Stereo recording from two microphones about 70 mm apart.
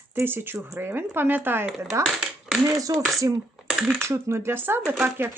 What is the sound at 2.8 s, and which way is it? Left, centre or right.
Speech, right.